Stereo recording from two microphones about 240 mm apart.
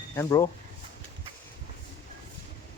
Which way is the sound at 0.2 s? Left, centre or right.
Centre.